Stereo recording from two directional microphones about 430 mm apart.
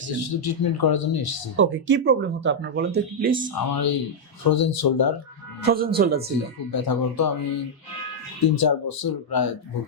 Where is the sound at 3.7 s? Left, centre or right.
Left.